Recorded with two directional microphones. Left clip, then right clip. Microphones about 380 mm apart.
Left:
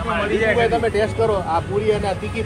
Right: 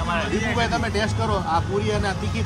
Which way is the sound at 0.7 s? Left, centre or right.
Centre.